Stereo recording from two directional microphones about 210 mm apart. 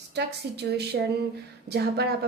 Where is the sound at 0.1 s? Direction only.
50° right (ahead or behind).